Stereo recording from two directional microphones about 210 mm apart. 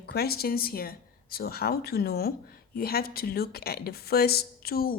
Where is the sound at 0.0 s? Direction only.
50° left (ahead or behind).